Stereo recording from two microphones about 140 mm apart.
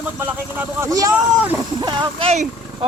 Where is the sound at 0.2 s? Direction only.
15° right (ahead or behind).